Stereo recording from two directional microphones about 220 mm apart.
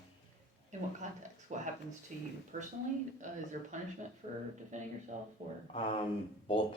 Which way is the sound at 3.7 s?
35° right (ahead or behind).